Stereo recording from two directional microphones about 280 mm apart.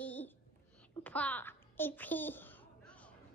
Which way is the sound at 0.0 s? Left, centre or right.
Centre.